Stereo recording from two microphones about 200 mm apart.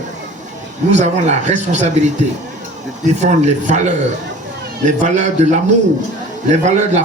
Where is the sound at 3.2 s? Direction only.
35° right (ahead or behind).